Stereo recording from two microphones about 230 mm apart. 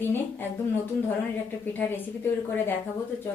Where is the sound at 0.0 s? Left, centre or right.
Centre.